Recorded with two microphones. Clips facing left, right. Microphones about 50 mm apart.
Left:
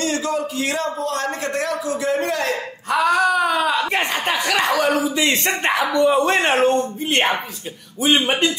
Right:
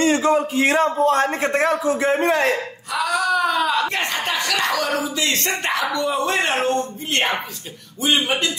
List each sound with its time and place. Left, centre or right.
0.0 s a man's voice: right
2.9 s speech: left
3.3 s speech: centre; by 8.5 s left